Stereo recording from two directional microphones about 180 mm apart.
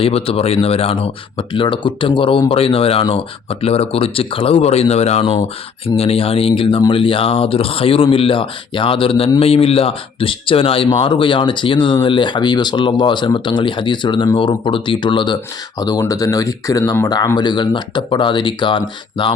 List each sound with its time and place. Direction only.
0.0 s speech: 30° left (ahead or behind)